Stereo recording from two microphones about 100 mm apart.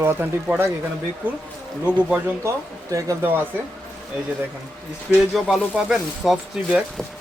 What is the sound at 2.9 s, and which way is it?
Speech, 30° right (ahead or behind).